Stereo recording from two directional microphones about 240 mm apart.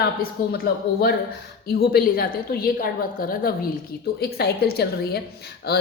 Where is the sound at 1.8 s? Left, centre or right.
Left.